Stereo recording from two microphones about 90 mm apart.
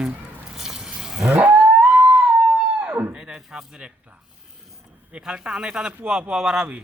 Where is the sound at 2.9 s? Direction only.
20° right (ahead or behind).